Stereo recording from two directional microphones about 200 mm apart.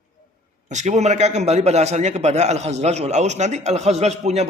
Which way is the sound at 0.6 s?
35° right (ahead or behind).